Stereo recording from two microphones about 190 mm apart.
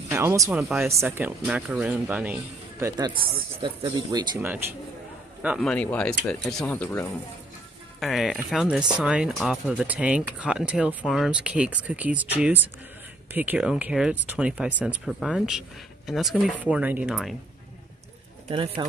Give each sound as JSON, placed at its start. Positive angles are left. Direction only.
{"t": 0.1, "sound": "speech", "side_deg": -15}
{"t": 0.6, "sound": "speech", "side_deg": 0}
{"t": 0.8, "sound": "speech", "side_deg": -15}
{"t": 2.8, "sound": "speech", "side_deg": -25}
{"t": 5.6, "sound": "speech", "side_deg": 5}
{"t": 18.5, "sound": "speech", "side_deg": -25}